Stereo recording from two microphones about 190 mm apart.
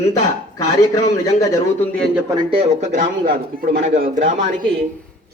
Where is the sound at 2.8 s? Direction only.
45° right (ahead or behind).